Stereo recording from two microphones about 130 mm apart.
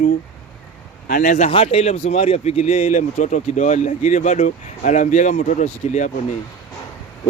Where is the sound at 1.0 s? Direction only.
90° left.